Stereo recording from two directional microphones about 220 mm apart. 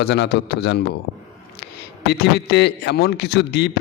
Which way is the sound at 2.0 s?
50° left (ahead or behind).